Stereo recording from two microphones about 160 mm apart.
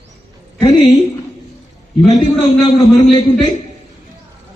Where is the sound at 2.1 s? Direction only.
25° left (ahead or behind).